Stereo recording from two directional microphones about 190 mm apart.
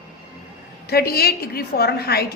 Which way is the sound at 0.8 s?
55° left (ahead or behind).